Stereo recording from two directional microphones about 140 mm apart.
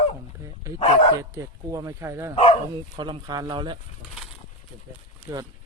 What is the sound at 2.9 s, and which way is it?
Speech, 30° right (ahead or behind).